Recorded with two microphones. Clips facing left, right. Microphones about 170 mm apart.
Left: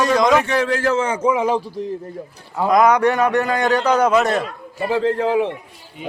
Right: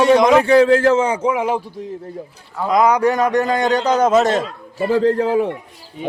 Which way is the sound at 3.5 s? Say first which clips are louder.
Right 1 dB; 20° right (ahead or behind).